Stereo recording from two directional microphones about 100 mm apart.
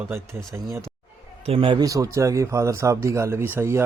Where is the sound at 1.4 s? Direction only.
65° right (ahead or behind).